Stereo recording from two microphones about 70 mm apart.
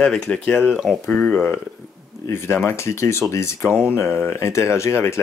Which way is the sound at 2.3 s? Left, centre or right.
Left.